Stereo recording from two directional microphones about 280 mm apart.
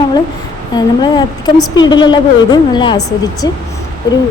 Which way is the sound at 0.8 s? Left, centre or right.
Centre.